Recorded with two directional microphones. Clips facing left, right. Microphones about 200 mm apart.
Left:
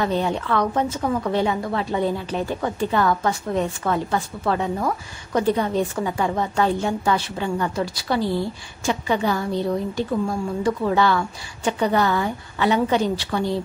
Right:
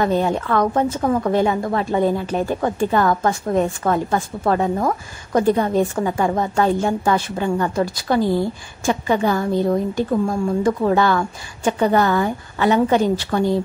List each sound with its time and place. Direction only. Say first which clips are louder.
0.0 s a woman's voice: right 4 dB; 45° right (ahead or behind)